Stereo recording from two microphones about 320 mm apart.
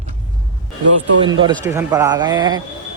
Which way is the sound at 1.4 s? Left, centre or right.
Centre.